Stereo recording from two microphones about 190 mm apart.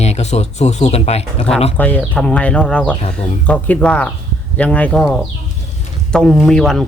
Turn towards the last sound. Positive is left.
turn(degrees=0)  # may be behind; listen again after turning